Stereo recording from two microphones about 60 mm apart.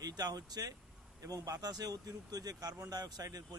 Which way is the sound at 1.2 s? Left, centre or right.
Right.